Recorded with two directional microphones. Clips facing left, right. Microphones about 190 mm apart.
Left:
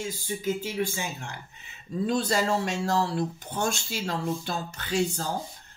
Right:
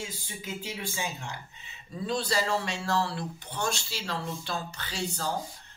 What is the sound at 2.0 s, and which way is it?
Speech, 45° left (ahead or behind).